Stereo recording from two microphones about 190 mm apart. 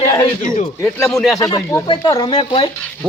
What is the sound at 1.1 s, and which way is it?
Speech, centre (ahead or behind).